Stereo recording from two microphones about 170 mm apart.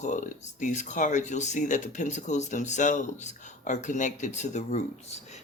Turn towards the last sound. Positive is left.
turn(degrees=40)  # may be behind; listen again after turning